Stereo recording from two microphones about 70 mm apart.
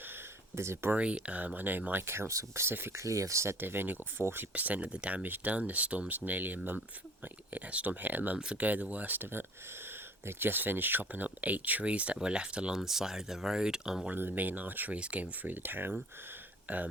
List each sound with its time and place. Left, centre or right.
0.5 s speech: right
0.9 s speech: centre
4.5 s speech: right
8.4 s speech: centre
14.1 s speech: right